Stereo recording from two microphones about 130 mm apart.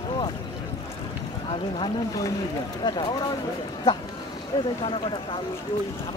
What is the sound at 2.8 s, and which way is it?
Speech, 35° left (ahead or behind).